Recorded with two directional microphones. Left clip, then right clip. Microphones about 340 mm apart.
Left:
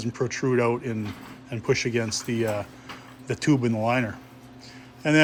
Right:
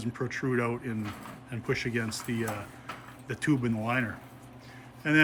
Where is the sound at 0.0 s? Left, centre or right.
Centre.